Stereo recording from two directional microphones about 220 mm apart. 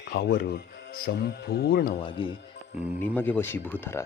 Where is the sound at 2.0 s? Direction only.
20° left (ahead or behind).